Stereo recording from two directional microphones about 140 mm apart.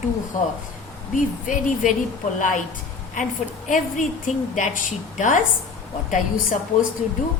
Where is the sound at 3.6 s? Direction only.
70° left (ahead or behind).